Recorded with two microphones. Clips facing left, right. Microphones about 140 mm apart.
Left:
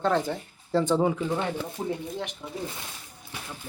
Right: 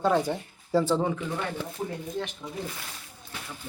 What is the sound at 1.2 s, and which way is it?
Speech, 25° left (ahead or behind).